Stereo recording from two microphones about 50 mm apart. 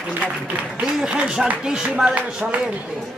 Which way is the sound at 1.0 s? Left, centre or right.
Centre.